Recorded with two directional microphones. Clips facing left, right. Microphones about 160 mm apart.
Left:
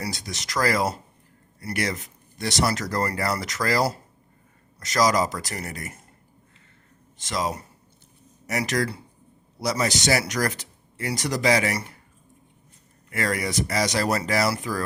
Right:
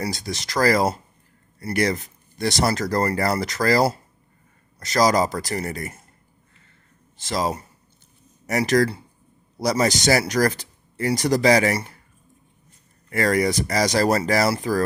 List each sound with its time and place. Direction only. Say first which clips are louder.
0.0 s speech: right 5 dB; 35° right (ahead or behind)
7.2 s speech: right 3 dB; 30° right (ahead or behind)
13.1 s speech: right 7 dB; 40° right (ahead or behind)